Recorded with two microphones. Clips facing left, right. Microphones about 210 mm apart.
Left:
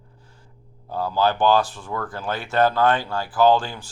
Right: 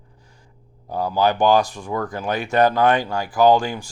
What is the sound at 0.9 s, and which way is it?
Speech, 15° right (ahead or behind).